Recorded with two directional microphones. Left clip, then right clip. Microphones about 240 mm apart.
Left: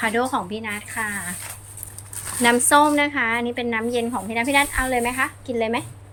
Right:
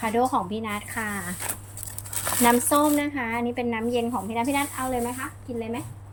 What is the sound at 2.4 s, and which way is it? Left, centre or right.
Speech, centre.